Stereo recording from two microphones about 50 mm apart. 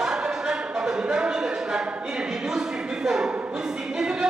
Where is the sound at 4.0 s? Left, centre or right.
Centre.